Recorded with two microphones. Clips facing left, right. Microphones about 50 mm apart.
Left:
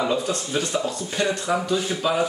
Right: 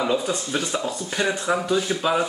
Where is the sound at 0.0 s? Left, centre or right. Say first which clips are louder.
Even; centre.